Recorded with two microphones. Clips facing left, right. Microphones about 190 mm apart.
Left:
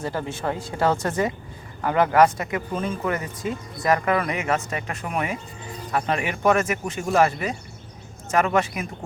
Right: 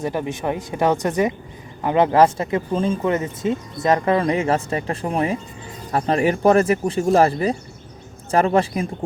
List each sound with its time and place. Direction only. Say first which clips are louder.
0.0 s speech: right 4 dB; 15° right (ahead or behind); by 8.9 s 30° right (ahead or behind)